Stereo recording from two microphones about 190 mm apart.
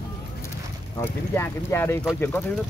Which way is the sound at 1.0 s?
10° left (ahead or behind).